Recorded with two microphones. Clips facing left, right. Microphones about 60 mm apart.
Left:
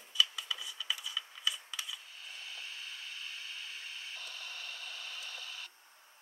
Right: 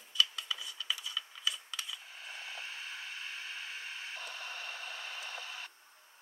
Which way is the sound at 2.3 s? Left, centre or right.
Right.